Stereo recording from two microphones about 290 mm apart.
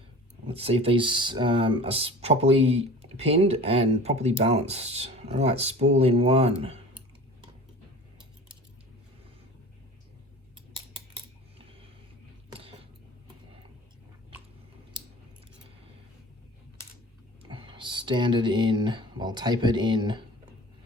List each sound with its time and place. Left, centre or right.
0.4 s speech: centre
12.5 s a sound: centre
17.5 s speech: centre